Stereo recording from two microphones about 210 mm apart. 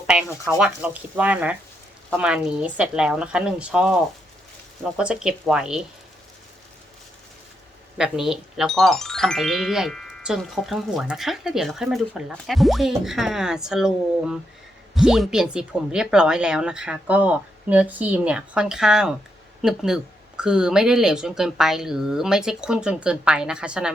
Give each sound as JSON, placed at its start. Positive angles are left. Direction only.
{"t": 0.4, "sound": "speech", "side_deg": -5}
{"t": 4.9, "sound": "speech", "side_deg": -5}
{"t": 7.9, "sound": "speech", "side_deg": 0}